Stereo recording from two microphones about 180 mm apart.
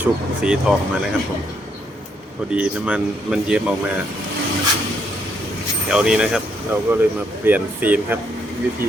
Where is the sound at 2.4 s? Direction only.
5° right (ahead or behind).